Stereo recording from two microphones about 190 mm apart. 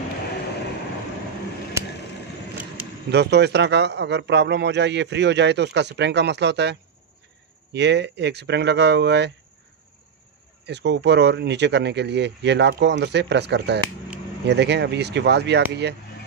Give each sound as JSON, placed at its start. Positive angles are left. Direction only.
{"t": 3.1, "sound": "a man's voice", "side_deg": -65}
{"t": 10.6, "sound": "a man's voice", "side_deg": -65}